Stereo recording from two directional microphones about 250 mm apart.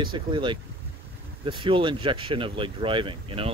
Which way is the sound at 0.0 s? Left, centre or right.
Centre.